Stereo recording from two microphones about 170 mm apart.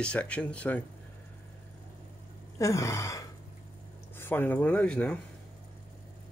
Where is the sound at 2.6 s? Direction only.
20° left (ahead or behind).